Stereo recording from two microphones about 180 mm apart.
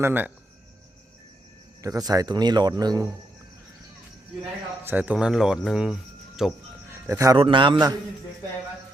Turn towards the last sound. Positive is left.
turn(degrees=-25)  # may be behind; listen again after turning